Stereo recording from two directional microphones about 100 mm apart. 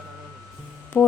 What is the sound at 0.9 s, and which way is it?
Music, 10° left (ahead or behind).